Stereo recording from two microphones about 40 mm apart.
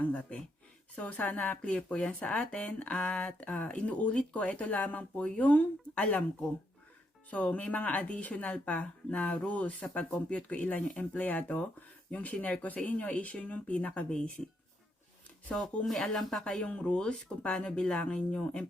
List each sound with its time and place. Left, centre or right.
0.0 s speech: left
7.3 s speech: left
14.1 s speech: left
15.9 s speech: centre
16.4 s speech: left